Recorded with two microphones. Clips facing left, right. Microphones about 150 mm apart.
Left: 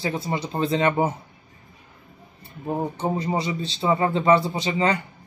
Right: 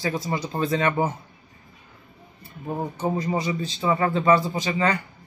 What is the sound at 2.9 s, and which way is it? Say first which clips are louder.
Speech: even; 25° left (ahead or behind).